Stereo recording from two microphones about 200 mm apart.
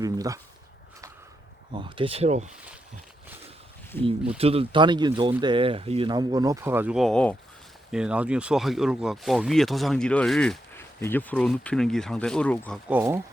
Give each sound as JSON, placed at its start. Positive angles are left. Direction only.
{"t": 0.0, "sound": "a sound", "side_deg": -15}
{"t": 1.7, "sound": "speech", "side_deg": -25}
{"t": 4.4, "sound": "speech", "side_deg": -30}
{"t": 12.9, "sound": "speech", "side_deg": -10}